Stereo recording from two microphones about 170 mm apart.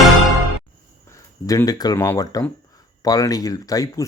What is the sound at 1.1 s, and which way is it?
Speech, 20° left (ahead or behind).